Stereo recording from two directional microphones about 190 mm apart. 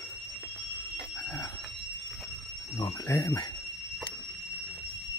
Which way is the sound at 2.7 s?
20° left (ahead or behind).